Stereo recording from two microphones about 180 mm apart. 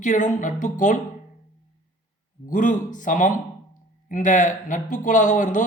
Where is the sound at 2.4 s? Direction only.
45° left (ahead or behind).